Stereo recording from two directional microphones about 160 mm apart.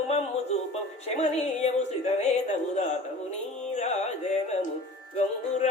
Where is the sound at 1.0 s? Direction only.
40° left (ahead or behind).